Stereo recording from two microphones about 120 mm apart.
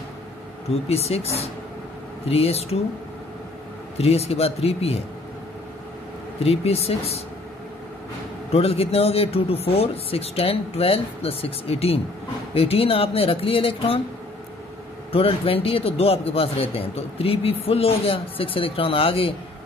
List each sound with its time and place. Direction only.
0.7 s speech: 60° left (ahead or behind)
4.0 s speech: 55° left (ahead or behind)
6.4 s speech: 55° left (ahead or behind)
8.5 s speech: 55° left (ahead or behind)
15.1 s speech: 50° left (ahead or behind)